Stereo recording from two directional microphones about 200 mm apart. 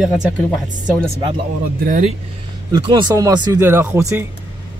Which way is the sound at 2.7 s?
20° right (ahead or behind).